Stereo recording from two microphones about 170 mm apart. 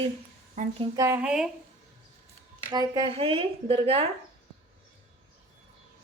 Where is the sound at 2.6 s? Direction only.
25° right (ahead or behind).